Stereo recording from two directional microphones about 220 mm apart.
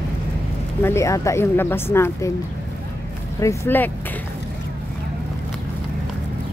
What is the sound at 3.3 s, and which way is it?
Speech, 10° left (ahead or behind).